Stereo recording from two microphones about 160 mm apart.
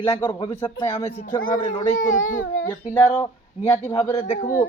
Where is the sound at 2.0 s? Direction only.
55° left (ahead or behind).